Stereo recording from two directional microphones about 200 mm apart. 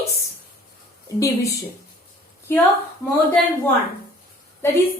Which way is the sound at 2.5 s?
10° left (ahead or behind).